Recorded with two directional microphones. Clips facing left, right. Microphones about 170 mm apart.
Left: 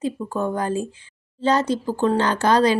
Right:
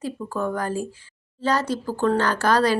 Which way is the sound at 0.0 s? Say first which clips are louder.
Left 3 dB; 20° left (ahead or behind).